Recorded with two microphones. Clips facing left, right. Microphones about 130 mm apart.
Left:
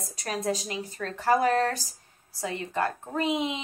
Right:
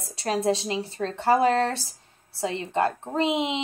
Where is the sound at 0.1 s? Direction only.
30° right (ahead or behind).